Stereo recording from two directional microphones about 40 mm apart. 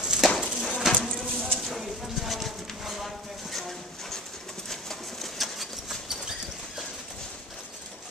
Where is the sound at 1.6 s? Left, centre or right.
Centre.